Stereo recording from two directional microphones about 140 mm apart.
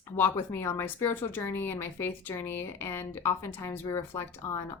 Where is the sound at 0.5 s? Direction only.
15° left (ahead or behind).